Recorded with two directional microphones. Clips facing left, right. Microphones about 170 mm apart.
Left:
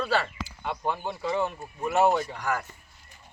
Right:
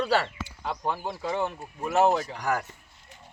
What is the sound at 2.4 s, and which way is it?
Speech, 40° right (ahead or behind).